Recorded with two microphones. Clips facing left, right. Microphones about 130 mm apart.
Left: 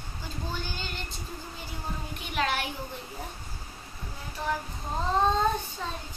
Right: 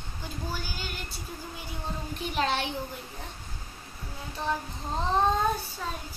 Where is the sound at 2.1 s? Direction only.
35° right (ahead or behind).